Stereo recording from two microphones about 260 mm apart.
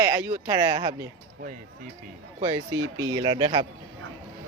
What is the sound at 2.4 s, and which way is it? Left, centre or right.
Speech, centre.